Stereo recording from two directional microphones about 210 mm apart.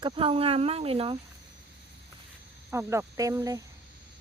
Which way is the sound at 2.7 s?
15° right (ahead or behind).